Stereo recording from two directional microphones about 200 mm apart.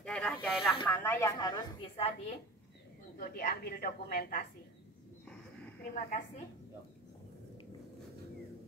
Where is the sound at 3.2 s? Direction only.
45° left (ahead or behind).